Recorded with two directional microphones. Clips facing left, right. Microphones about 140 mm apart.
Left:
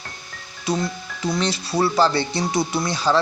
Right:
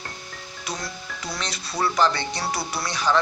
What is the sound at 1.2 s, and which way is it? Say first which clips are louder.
Speech: left 10 dB; 30° left (ahead or behind).